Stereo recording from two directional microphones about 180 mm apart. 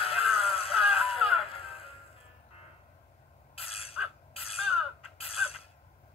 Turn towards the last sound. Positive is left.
turn(degrees=30)  # may be behind; listen again after turning